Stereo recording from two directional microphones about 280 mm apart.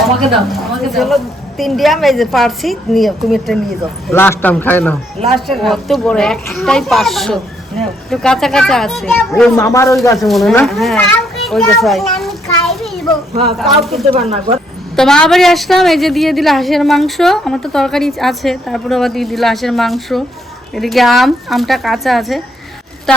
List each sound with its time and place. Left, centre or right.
0.0 s a woman's voice: centre
10.2 s a child's voice: centre
13.3 s speech: right
14.9 s a woman's voice: centre